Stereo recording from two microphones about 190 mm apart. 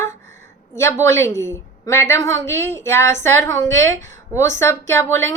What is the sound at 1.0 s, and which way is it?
A woman's voice, 15° left (ahead or behind).